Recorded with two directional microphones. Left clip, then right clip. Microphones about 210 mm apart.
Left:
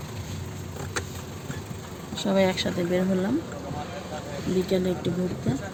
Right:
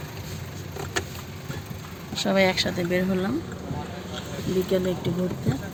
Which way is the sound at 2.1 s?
Centre (ahead or behind).